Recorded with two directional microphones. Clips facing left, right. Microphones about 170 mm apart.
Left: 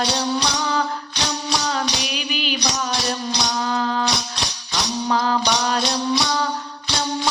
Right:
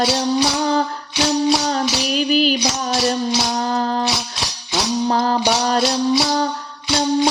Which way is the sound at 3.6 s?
40° right (ahead or behind).